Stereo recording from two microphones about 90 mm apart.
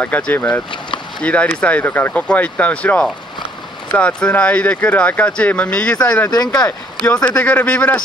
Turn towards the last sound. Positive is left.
turn(degrees=15)  # may be behind; listen again after turning